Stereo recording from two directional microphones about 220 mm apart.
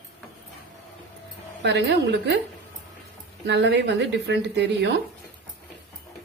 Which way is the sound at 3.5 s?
50° right (ahead or behind).